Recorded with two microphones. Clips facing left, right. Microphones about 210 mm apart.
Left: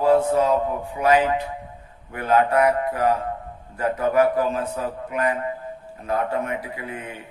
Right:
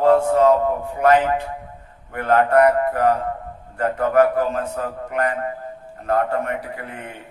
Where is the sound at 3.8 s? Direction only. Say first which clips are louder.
Right 2 dB; 60° right (ahead or behind).